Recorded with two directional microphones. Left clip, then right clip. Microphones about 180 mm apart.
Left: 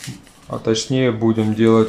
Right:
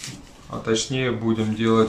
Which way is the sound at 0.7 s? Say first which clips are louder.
Left 5 dB; 30° left (ahead or behind).